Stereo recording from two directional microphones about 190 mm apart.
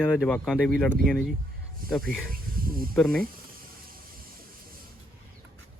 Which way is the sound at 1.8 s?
50° right (ahead or behind).